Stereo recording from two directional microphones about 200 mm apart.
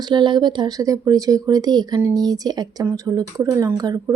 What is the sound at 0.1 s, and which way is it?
Speech, 25° right (ahead or behind).